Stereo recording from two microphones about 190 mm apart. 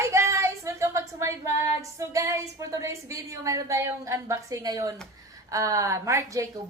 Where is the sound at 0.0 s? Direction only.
15° right (ahead or behind).